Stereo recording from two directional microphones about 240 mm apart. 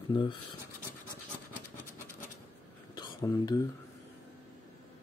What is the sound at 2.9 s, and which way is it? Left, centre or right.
Whispering, centre.